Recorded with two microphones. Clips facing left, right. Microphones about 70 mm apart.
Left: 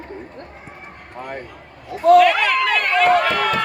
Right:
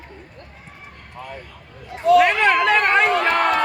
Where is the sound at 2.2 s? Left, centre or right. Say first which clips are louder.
Even; right.